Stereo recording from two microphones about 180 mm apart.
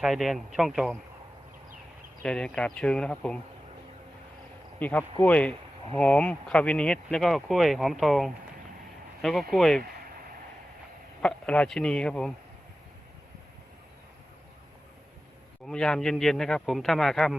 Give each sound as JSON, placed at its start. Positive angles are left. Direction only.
{"t": 0.0, "sound": "speech", "side_deg": 0}
{"t": 2.2, "sound": "speech", "side_deg": 5}
{"t": 4.8, "sound": "speech", "side_deg": 10}
{"t": 9.5, "sound": "speech", "side_deg": 0}
{"t": 11.2, "sound": "speech", "side_deg": 5}
{"t": 15.6, "sound": "speech", "side_deg": 5}